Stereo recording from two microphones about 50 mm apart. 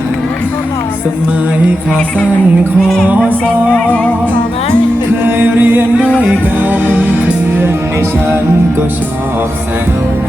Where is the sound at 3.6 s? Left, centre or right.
Left.